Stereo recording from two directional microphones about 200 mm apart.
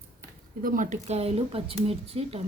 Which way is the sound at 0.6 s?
40° right (ahead or behind).